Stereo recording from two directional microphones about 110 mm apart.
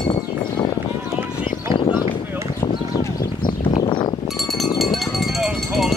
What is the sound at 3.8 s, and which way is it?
Chink, 45° left (ahead or behind).